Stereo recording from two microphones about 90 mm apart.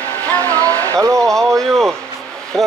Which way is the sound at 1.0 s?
35° right (ahead or behind).